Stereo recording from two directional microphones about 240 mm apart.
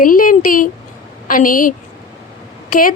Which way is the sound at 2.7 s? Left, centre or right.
Left.